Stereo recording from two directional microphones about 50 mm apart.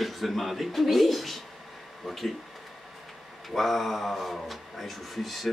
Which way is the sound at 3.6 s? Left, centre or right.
Centre.